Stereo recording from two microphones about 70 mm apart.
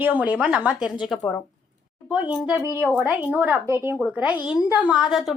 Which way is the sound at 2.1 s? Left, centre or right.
Centre.